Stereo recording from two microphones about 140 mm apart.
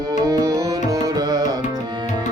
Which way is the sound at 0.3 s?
25° right (ahead or behind).